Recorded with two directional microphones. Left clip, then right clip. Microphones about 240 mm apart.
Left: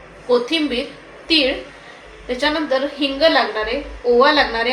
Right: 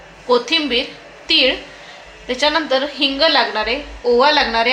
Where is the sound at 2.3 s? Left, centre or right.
Right.